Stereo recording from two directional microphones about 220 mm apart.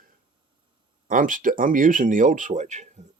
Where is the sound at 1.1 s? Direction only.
35° right (ahead or behind).